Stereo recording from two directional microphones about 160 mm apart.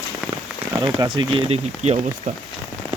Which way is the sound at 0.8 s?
30° right (ahead or behind).